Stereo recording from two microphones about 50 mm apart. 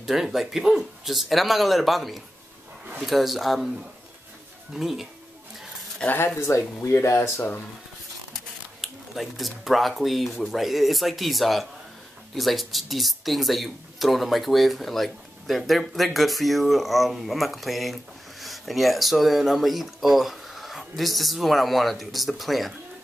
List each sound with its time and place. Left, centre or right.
0.0 s speech: centre
4.7 s speech: centre
6.0 s speech: left
6.4 s speech: left
8.8 s speech: centre